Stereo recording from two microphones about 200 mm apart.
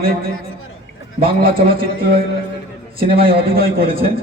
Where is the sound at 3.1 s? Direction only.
50° right (ahead or behind).